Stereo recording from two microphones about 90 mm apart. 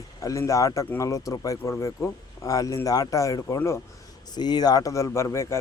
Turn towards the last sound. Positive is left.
turn(degrees=30)  # may be behind; listen again after turning